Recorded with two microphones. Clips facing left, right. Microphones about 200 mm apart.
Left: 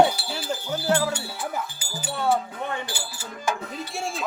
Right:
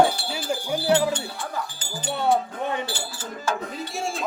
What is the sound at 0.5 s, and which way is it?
Speech, 10° right (ahead or behind).